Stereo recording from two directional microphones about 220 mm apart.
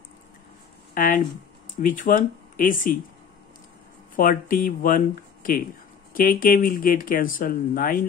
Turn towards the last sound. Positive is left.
turn(degrees=40)  # may be behind; listen again after turning